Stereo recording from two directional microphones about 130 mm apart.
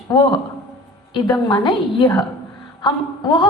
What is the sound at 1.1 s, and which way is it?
A woman's voice, 35° left (ahead or behind).